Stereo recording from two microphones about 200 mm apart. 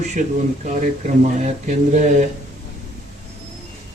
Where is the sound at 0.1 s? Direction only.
40° right (ahead or behind).